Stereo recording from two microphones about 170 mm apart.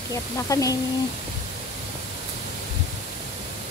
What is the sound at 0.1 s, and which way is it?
Speech, 20° left (ahead or behind).